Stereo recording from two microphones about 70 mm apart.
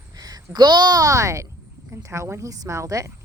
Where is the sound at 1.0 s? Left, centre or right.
Right.